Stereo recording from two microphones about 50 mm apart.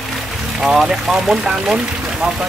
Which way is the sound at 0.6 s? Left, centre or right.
Centre.